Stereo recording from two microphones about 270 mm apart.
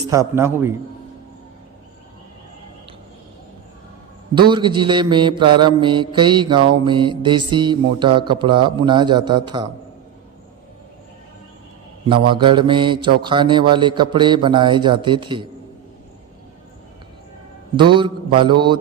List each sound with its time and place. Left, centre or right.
0.1 s mantra: centre
4.4 s mantra: centre
12.0 s mantra: centre
17.7 s mantra: centre